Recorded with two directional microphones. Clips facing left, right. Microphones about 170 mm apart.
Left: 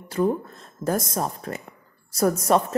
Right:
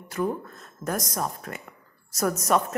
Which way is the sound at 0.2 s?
30° left (ahead or behind).